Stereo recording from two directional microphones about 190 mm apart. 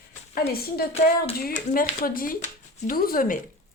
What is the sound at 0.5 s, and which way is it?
Speech, 55° left (ahead or behind).